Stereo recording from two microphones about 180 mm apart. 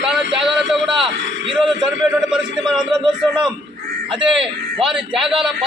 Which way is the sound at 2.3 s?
5° right (ahead or behind).